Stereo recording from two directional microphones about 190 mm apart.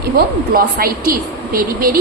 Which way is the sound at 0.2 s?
55° right (ahead or behind).